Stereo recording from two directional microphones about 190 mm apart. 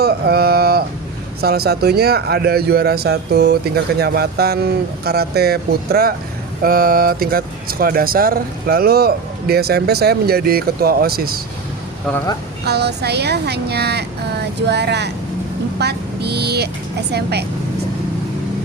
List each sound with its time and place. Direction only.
0.0 s a sound: 55° right (ahead or behind)
1.4 s speech: 55° right (ahead or behind)
12.6 s speech: 60° right (ahead or behind)